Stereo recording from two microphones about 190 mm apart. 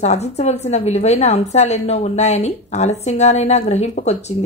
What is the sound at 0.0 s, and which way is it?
A woman's voice, 35° left (ahead or behind).